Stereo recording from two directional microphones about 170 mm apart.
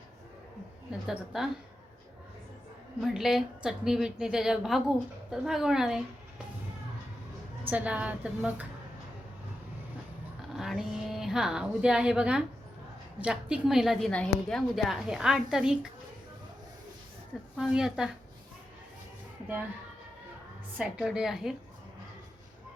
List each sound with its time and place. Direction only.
0.9 s a woman's voice: 5° right (ahead or behind)
3.0 s a woman's voice: centre (ahead or behind)
7.6 s a woman's voice: 10° right (ahead or behind)
10.5 s a woman's voice: centre (ahead or behind)
17.6 s a woman's voice: 5° right (ahead or behind)
20.7 s a woman's voice: 5° right (ahead or behind)